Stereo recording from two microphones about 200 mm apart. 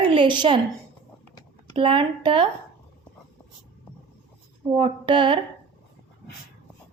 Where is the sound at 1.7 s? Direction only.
25° right (ahead or behind).